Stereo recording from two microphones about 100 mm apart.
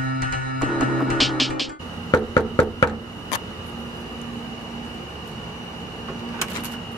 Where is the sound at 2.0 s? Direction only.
35° left (ahead or behind).